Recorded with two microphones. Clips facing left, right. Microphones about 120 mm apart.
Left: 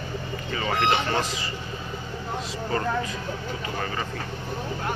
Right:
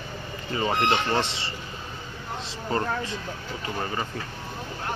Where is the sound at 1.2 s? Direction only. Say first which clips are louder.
Even; 30° right (ahead or behind).